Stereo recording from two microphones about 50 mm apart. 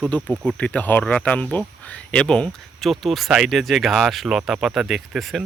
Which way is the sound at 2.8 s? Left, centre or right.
Centre.